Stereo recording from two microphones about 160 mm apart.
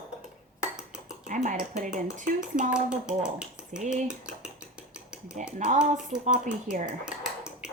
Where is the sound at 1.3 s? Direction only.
50° right (ahead or behind).